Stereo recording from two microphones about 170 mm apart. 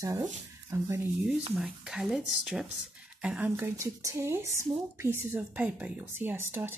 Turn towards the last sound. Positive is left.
turn(degrees=-15)  # may be behind; listen again after turning